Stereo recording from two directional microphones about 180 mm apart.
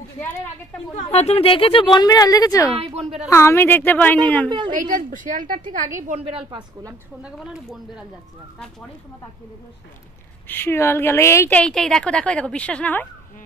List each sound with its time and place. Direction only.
0.9 s speech: 35° left (ahead or behind); by 2.7 s 20° left (ahead or behind)
2.8 s a woman's voice: 35° right (ahead or behind)
3.3 s a woman's voice: 15° left (ahead or behind)
4.5 s a woman's voice: 25° right (ahead or behind)
4.7 s a woman's voice: 45° right (ahead or behind)
6.0 s a woman's voice: 35° right (ahead or behind)
7.2 s speech: 5° right (ahead or behind)
10.5 s a woman's voice: 15° left (ahead or behind)